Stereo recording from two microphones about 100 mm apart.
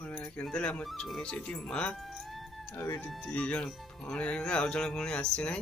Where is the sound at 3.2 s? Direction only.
15° left (ahead or behind).